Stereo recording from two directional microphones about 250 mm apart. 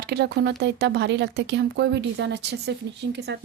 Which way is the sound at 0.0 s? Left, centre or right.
Right.